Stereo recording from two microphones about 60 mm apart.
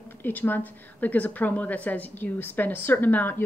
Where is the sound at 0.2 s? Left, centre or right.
Left.